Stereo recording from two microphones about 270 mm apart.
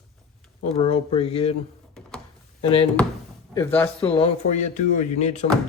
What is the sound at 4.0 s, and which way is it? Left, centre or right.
Speech, left.